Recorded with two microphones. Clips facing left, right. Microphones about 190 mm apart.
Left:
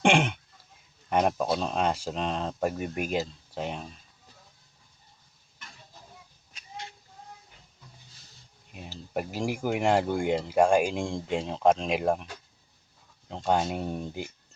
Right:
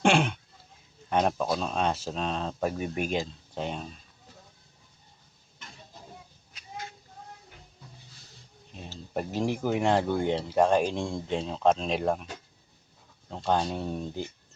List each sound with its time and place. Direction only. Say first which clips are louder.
0.0 s throat clearing: even; 15° left (ahead or behind)
1.1 s speech: left 1 dB; 5° left (ahead or behind)
8.7 s speech: left 1 dB; 10° left (ahead or behind)
13.3 s speech: left 1 dB; 10° left (ahead or behind)